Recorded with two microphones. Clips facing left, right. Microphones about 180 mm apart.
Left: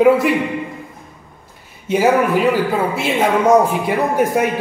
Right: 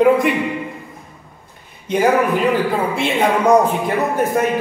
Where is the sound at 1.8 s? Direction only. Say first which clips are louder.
Left 1 dB; 5° left (ahead or behind).